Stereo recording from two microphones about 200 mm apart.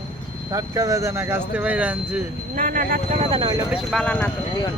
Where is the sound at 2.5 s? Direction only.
45° right (ahead or behind).